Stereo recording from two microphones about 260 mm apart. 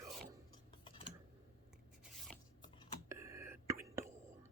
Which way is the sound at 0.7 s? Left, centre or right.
Centre.